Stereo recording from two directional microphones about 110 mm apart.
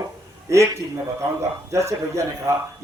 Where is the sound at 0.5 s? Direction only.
30° right (ahead or behind).